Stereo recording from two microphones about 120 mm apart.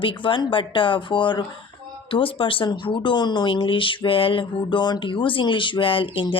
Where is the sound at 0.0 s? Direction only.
45° left (ahead or behind).